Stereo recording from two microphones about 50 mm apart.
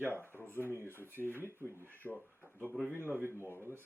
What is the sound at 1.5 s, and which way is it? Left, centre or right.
Speech, right.